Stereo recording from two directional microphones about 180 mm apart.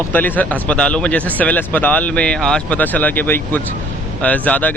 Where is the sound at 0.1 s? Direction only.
10° left (ahead or behind).